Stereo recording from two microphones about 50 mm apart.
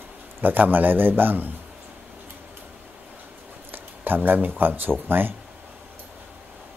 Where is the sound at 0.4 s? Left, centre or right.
Right.